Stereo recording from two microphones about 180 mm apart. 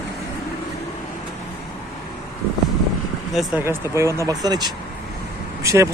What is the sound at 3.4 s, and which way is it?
Speech, 10° right (ahead or behind).